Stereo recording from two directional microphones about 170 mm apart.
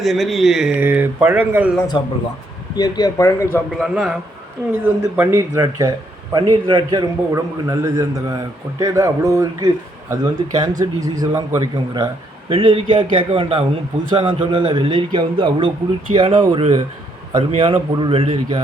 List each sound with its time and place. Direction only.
0.0 s speech: centre (ahead or behind)
2.0 s speech: 25° left (ahead or behind)
3.8 s a man's voice: centre (ahead or behind)
4.7 s a man's voice: 15° right (ahead or behind)